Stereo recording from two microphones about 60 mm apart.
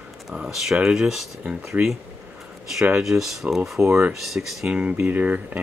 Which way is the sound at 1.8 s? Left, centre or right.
Right.